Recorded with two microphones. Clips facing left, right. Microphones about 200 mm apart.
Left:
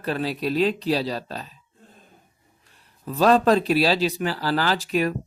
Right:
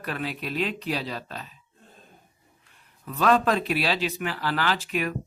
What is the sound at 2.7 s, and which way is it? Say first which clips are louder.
Speech: left 6 dB; 35° left (ahead or behind).